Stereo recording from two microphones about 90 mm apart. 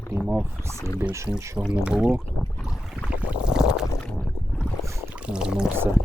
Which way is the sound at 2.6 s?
5° right (ahead or behind).